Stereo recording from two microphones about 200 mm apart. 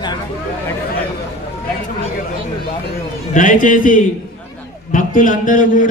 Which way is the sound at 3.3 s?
40° left (ahead or behind).